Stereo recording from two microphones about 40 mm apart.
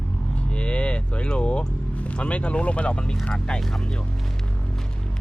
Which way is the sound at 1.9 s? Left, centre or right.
Left.